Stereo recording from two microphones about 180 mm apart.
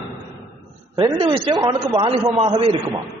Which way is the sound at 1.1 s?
30° right (ahead or behind).